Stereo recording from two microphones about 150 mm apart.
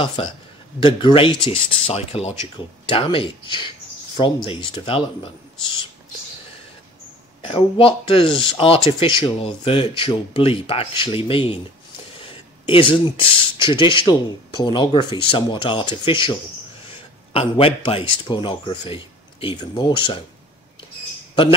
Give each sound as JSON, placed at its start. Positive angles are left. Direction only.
{"t": 0.0, "sound": "speech", "side_deg": 35}
{"t": 7.4, "sound": "speech", "side_deg": 35}